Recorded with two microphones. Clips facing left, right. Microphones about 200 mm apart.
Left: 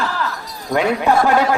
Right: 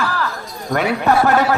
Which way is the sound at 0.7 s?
15° left (ahead or behind).